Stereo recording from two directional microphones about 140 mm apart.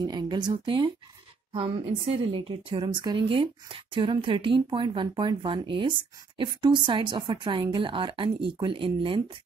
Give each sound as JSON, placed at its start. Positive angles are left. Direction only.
{"t": 0.0, "sound": "a woman's voice", "side_deg": -30}